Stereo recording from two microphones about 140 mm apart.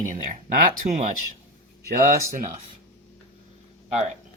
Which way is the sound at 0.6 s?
65° right (ahead or behind).